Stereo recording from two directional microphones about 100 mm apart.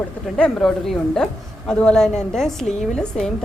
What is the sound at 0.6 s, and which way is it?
A woman's voice, 5° left (ahead or behind).